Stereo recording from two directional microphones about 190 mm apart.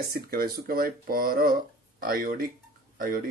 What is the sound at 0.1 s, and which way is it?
Speech, 50° right (ahead or behind).